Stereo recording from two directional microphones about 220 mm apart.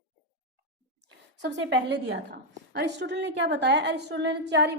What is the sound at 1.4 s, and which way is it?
A woman's voice, 50° right (ahead or behind).